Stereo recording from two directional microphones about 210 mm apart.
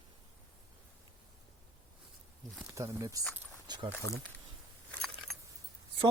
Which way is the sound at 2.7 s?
15° right (ahead or behind).